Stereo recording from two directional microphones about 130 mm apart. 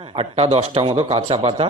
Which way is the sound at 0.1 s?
45° right (ahead or behind).